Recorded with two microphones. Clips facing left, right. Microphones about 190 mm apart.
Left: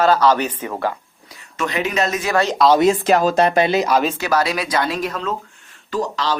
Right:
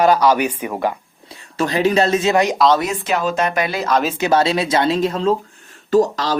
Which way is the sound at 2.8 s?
35° left (ahead or behind).